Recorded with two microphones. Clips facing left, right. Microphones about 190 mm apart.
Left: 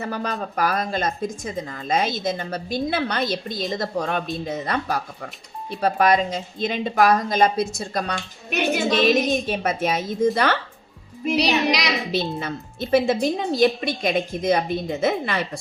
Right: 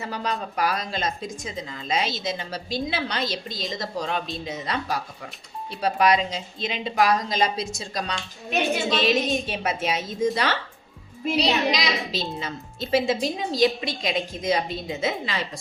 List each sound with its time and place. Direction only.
0.0 s a woman's voice: 55° left (ahead or behind)
8.8 s a woman's voice: 45° left (ahead or behind)
11.3 s speech: 70° left (ahead or behind)